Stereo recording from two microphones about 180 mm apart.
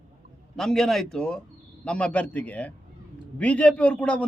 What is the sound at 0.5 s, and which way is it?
A man's voice, centre (ahead or behind).